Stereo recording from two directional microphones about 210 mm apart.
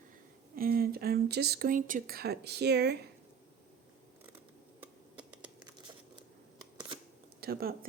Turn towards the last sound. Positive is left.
turn(degrees=-45)  # may be behind; listen again after turning